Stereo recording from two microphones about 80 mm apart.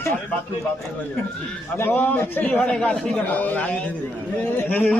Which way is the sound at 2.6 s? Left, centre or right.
Centre.